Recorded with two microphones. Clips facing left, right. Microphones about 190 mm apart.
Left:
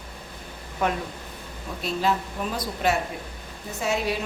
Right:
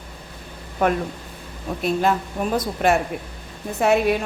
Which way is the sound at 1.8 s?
55° right (ahead or behind).